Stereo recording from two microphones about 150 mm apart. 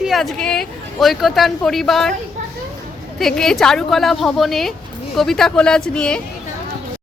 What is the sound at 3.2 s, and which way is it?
Speech, 5° left (ahead or behind).